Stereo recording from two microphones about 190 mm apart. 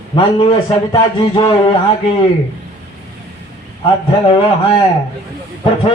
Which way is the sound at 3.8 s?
25° left (ahead or behind).